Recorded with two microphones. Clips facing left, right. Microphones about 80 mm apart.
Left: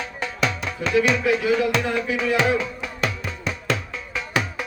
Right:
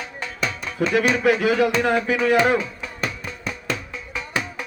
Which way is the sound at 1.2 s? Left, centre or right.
Right.